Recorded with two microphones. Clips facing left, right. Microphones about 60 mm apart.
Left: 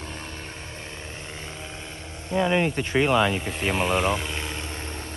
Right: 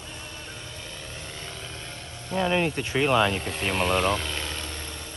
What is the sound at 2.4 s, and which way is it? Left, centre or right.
Speech, centre.